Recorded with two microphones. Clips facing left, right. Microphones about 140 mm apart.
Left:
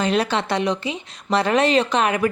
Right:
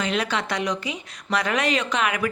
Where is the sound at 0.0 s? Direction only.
35° left (ahead or behind).